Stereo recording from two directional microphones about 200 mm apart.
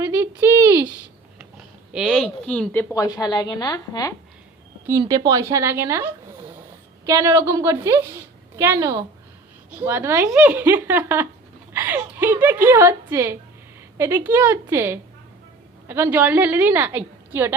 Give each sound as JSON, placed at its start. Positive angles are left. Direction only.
{"t": 0.0, "sound": "a sound", "side_deg": -10}
{"t": 2.9, "sound": "speech", "side_deg": 20}
{"t": 4.9, "sound": "a woman's voice", "side_deg": -20}